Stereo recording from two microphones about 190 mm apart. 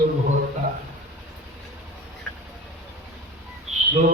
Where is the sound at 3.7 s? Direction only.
35° right (ahead or behind).